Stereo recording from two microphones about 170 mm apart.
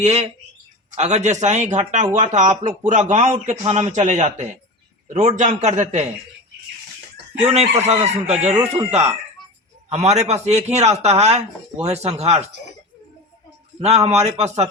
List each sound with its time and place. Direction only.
0.0 s speech: 40° right (ahead or behind)
7.4 s speech: 35° right (ahead or behind)
13.7 s speech: 40° right (ahead or behind)